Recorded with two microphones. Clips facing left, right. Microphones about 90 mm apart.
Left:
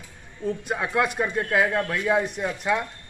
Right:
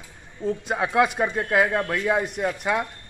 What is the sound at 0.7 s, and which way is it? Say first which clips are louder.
Speech: right 4 dB; 5° right (ahead or behind).